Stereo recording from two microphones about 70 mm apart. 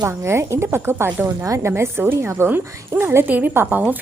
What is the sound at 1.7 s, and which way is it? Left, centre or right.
A woman's voice, right.